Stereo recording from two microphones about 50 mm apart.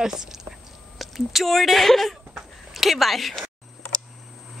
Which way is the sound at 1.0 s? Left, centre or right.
Centre.